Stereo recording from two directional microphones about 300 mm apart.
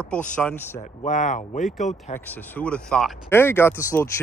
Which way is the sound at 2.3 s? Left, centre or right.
Centre.